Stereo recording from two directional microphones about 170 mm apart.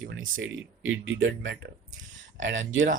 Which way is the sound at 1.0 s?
90° right.